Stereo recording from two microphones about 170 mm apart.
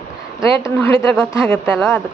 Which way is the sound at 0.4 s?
20° left (ahead or behind).